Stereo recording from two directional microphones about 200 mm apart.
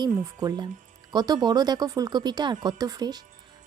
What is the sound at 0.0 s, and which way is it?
Speech, 20° right (ahead or behind).